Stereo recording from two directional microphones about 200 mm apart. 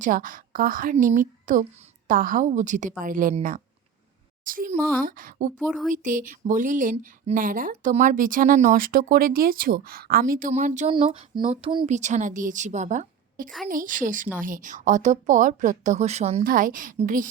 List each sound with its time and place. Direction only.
0.0 s a woman's voice: 40° right (ahead or behind); by 11.9 s 25° right (ahead or behind)
11.9 s a woman's voice: 35° right (ahead or behind)
16.4 s speech: 45° right (ahead or behind)